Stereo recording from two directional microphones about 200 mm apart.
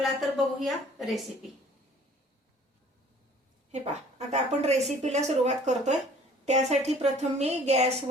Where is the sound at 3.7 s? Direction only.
35° right (ahead or behind).